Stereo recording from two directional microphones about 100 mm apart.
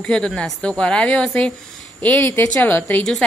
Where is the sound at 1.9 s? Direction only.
20° left (ahead or behind).